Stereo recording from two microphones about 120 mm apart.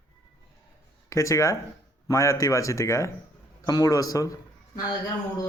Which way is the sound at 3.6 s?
30° left (ahead or behind).